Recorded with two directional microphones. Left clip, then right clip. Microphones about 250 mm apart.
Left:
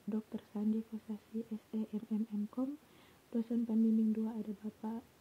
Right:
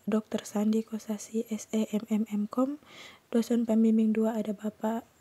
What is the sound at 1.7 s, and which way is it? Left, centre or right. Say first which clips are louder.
Speech: right 10 dB; right.